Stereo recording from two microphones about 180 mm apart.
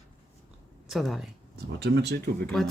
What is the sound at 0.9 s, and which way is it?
Speech, centre (ahead or behind).